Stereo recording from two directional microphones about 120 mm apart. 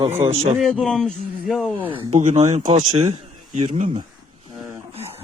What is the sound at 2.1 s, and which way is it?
Speech, 75° right (ahead or behind).